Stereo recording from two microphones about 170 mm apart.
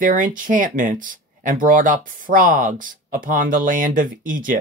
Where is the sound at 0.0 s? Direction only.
50° right (ahead or behind).